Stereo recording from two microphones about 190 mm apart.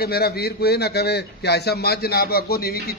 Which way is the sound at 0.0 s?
55° left (ahead or behind).